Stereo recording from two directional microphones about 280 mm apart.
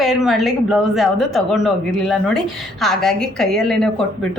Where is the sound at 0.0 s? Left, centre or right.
Centre.